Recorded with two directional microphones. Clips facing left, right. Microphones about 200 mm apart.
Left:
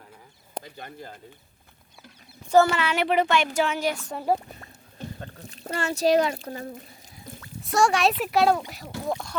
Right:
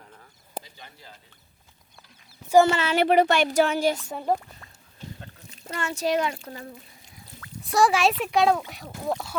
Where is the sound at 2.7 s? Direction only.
30° right (ahead or behind).